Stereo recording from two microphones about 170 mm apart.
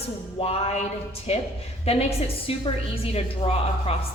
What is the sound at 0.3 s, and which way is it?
A woman's voice, 35° left (ahead or behind).